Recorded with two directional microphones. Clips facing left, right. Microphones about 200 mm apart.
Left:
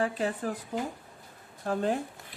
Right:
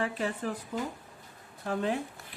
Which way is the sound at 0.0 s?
40° left (ahead or behind).